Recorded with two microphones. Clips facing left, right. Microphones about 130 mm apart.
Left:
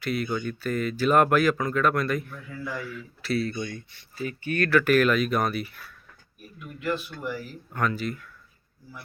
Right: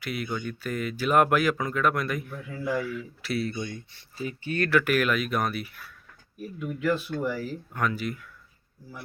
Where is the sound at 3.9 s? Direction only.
25° right (ahead or behind).